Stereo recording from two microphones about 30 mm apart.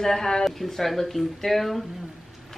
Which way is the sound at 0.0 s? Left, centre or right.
Centre.